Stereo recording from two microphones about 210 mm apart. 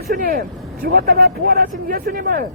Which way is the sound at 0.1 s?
45° right (ahead or behind).